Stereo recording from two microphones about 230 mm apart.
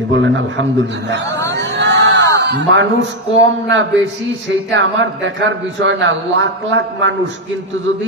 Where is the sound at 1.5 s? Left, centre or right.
Right.